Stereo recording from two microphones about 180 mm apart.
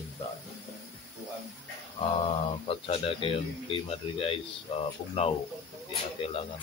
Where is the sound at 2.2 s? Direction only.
35° left (ahead or behind).